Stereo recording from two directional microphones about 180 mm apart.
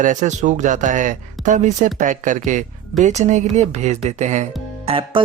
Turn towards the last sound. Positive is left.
turn(degrees=-30)  # may be behind; listen again after turning